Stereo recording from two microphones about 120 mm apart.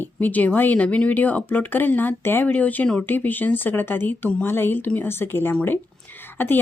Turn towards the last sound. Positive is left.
turn(degrees=15)  # may be behind; listen again after turning